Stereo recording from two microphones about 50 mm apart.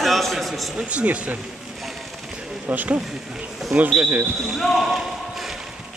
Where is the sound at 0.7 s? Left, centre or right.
Right.